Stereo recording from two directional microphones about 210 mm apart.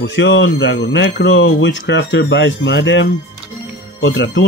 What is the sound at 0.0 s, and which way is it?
Speech, 60° left (ahead or behind).